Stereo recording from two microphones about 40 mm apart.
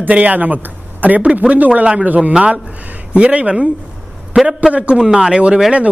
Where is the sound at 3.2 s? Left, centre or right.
Right.